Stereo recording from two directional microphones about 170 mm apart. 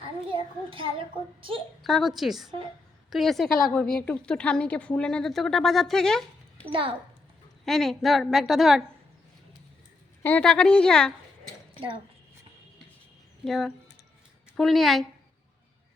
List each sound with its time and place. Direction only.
0.3 s a child's voice: 30° right (ahead or behind)
1.8 s a woman's voice: centre (ahead or behind)
6.7 s a child's voice: 30° right (ahead or behind)
7.6 s a woman's voice: centre (ahead or behind)
10.2 s a woman's voice: 5° left (ahead or behind)
13.4 s a woman's voice: centre (ahead or behind)